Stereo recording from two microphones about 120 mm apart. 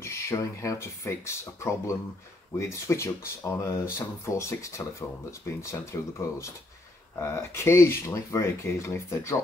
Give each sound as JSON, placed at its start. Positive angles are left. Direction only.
{"t": 0.0, "sound": "speech", "side_deg": 25}